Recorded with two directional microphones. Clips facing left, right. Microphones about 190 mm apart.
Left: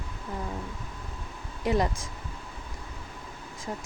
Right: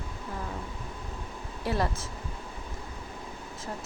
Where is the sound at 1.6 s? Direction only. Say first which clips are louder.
Left 3 dB; 15° left (ahead or behind).